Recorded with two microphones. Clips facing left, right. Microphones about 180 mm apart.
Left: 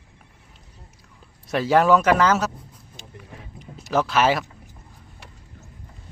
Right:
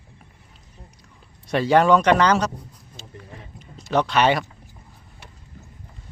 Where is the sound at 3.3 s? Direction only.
5° left (ahead or behind).